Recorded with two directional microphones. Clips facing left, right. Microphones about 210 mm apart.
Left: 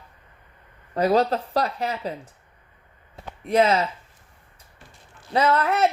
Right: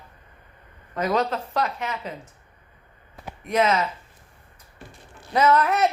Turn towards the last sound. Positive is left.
turn(degrees=30)  # may be behind; listen again after turning